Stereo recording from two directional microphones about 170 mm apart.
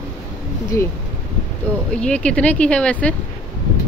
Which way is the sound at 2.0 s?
5° left (ahead or behind).